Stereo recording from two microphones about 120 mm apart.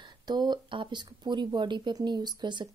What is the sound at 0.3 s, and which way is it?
Speech, 35° right (ahead or behind).